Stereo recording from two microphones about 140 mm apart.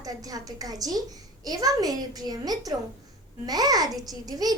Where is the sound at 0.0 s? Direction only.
25° right (ahead or behind).